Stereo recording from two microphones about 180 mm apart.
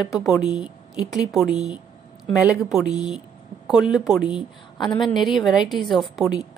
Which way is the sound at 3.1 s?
Centre (ahead or behind).